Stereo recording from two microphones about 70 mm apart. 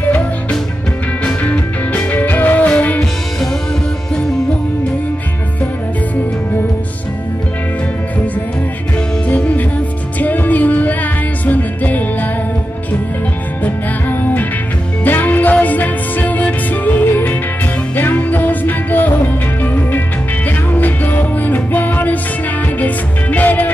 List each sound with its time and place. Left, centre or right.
1.2 s music: centre
9.3 s music: left
14.0 s music: left